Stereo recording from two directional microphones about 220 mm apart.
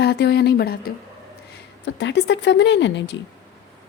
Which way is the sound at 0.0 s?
50° left (ahead or behind).